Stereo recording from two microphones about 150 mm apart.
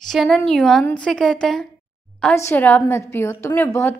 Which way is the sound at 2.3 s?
15° left (ahead or behind).